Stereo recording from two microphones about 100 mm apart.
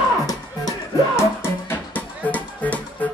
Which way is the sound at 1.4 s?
15° left (ahead or behind).